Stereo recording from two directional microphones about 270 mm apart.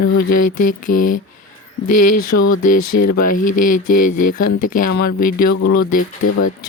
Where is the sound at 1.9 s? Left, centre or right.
Left.